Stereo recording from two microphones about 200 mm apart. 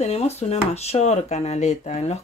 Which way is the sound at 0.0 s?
35° left (ahead or behind).